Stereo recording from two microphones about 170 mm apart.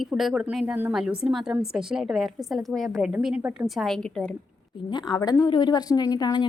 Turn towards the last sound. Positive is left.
turn(degrees=25)  # may be behind; listen again after turning